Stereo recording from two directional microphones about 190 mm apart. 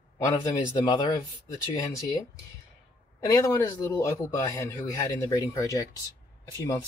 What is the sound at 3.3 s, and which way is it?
Speech, 15° left (ahead or behind).